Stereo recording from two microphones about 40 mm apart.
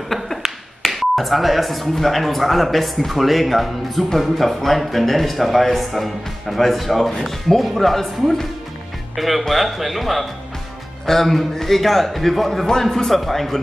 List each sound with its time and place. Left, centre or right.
0.3 s tap: centre
0.8 s speech: centre